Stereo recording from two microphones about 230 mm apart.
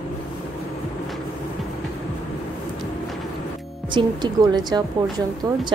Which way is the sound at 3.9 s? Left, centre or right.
Centre.